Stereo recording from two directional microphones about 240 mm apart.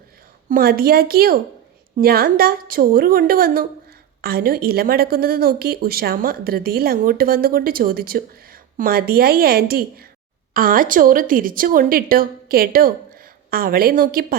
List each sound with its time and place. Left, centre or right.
0.4 s a woman's voice: right